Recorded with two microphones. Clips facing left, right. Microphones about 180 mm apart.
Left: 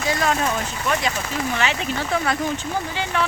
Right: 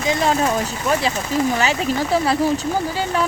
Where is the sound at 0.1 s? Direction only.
30° right (ahead or behind).